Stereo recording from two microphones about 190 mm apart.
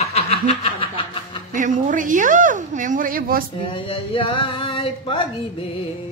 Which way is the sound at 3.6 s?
30° left (ahead or behind).